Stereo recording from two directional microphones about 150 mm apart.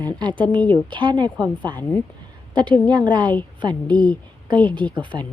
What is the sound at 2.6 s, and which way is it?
Speech, 5° left (ahead or behind).